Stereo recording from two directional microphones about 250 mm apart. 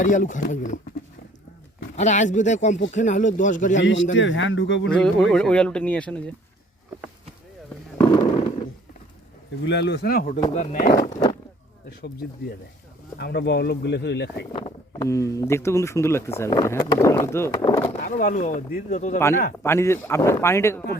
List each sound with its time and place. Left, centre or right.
0.0 s speech: left
2.0 s speech: left
3.8 s speech: left
4.9 s speech: centre
7.9 s a sound: centre
9.6 s speech: left
13.1 s speech: left
14.5 s speech: centre
18.0 s speech: left
19.6 s speech: centre